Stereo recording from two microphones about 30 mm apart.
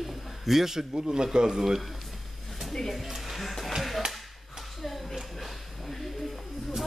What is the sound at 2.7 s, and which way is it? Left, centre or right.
Speech, centre.